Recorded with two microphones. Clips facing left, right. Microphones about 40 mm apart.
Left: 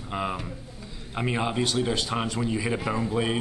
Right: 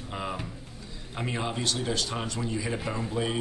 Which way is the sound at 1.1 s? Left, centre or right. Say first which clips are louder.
Left 5 dB; centre.